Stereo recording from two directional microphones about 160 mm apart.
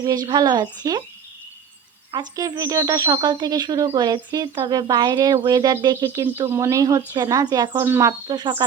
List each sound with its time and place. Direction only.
0.0 s speech: 25° right (ahead or behind)
2.1 s speech: 20° right (ahead or behind)